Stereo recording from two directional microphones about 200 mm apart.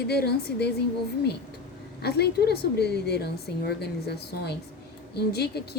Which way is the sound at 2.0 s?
55° left (ahead or behind).